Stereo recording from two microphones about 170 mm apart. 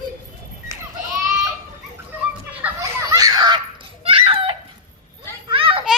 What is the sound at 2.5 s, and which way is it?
Children playing, 10° right (ahead or behind).